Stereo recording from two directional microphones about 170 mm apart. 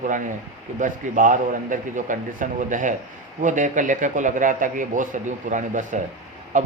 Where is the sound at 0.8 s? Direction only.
50° right (ahead or behind).